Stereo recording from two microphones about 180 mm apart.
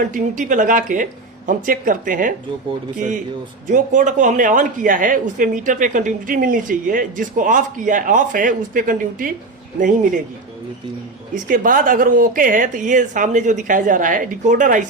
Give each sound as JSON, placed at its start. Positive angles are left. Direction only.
{"t": 0.0, "sound": "speech", "side_deg": -45}
{"t": 11.4, "sound": "speech", "side_deg": -50}